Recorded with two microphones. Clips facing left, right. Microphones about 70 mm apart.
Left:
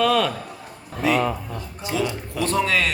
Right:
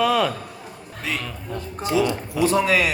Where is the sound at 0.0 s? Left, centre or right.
Centre.